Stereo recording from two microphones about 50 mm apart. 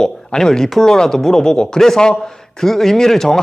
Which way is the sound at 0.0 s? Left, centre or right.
Centre.